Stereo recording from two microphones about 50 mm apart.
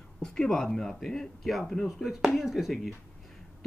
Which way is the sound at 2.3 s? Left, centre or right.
Centre.